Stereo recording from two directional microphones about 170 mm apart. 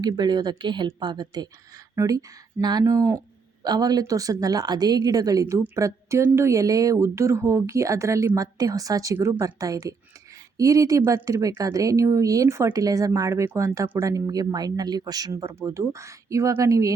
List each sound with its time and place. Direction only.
0.0 s a woman's voice: 25° right (ahead or behind)